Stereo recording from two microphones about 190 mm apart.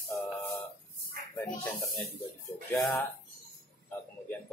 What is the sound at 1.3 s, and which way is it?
Speech, 10° left (ahead or behind).